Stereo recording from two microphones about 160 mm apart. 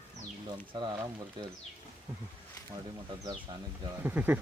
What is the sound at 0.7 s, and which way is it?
Speech, 25° right (ahead or behind).